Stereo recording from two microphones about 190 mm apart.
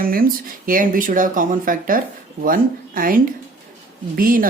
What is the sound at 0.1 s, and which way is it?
Speech, 50° right (ahead or behind).